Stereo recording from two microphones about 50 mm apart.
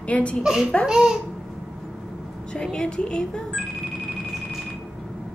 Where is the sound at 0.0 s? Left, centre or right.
Left.